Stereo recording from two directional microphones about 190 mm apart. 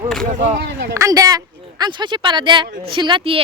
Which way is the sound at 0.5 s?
65° right (ahead or behind).